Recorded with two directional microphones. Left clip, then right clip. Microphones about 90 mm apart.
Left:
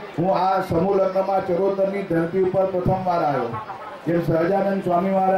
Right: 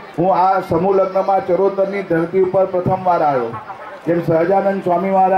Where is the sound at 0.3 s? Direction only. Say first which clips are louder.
Right 6 dB; 40° right (ahead or behind).